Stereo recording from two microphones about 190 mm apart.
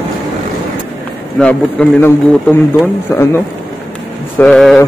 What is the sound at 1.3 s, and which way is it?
Speech, 5° left (ahead or behind).